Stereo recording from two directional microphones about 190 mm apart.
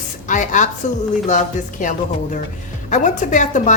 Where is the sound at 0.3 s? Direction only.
40° left (ahead or behind).